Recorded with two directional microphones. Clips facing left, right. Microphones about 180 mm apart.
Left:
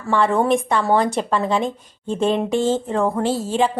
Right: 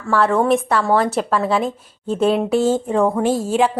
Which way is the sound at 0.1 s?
Centre (ahead or behind).